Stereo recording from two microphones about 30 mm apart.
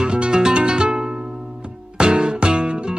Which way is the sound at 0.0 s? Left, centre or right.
Right.